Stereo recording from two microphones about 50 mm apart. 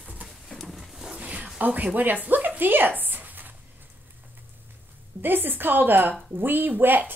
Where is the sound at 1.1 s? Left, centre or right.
Right.